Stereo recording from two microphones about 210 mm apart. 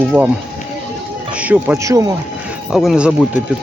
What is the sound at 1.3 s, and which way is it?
Speech, 5° right (ahead or behind).